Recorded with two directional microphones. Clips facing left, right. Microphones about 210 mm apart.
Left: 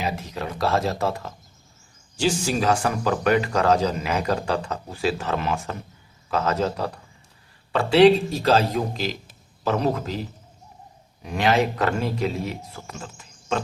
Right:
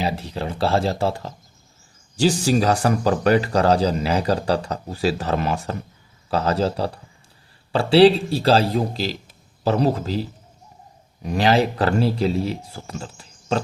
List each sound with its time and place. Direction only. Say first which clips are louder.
0.0 s speech: right 3 dB; 30° right (ahead or behind)